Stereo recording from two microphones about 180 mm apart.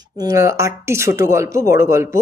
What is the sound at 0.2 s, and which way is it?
A woman's voice, 15° right (ahead or behind).